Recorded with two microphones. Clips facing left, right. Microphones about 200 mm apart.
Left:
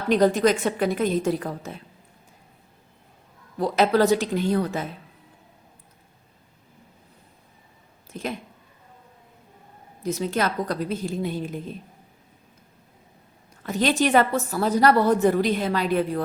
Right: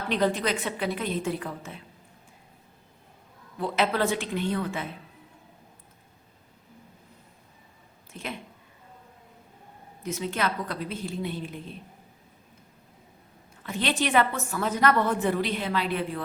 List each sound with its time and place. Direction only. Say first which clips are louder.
0.1 s a woman's voice: left 7 dB; 45° left (ahead or behind)
3.6 s a woman's voice: left 6 dB; 40° left (ahead or behind)
8.1 s speech: left 6 dB; 40° left (ahead or behind)
10.0 s a woman's voice: left 5 dB; 35° left (ahead or behind)
13.6 s a woman's voice: left 6 dB; 40° left (ahead or behind)